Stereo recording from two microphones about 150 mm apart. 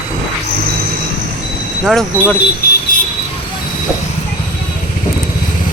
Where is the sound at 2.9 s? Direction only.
65° left (ahead or behind).